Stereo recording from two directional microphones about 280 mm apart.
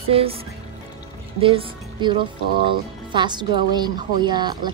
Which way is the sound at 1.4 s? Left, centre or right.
Centre.